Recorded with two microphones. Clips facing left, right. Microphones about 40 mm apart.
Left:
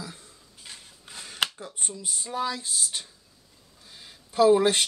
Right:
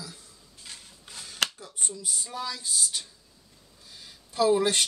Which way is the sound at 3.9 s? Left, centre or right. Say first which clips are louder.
Left 4 dB; centre.